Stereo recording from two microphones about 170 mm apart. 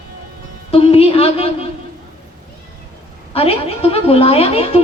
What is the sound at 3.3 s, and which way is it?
Speech, 35° left (ahead or behind).